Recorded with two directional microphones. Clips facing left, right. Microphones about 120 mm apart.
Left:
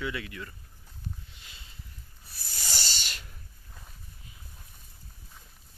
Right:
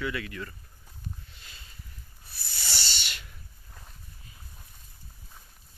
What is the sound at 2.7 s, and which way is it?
Owl, 40° left (ahead or behind).